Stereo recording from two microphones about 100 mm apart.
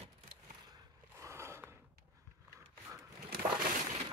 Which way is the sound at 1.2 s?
30° right (ahead or behind).